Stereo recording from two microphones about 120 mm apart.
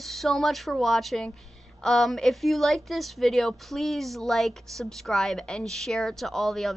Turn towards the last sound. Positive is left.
turn(degrees=0)  # may be behind; listen again after turning